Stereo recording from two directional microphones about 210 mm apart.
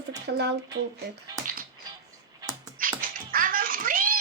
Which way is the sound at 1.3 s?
20° right (ahead or behind).